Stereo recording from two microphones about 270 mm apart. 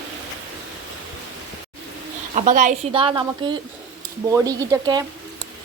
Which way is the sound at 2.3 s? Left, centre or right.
Right.